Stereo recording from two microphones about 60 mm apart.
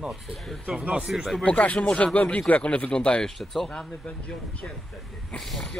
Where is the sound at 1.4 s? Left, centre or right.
Left.